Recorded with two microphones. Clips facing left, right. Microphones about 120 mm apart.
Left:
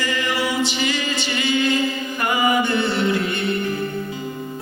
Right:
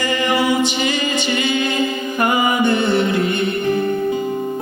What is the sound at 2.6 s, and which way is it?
Mantra, 55° right (ahead or behind).